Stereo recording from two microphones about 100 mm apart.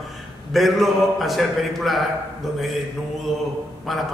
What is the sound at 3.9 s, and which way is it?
Speech, centre (ahead or behind).